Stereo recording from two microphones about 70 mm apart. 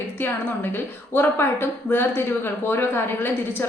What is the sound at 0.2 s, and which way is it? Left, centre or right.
A woman's voice, left.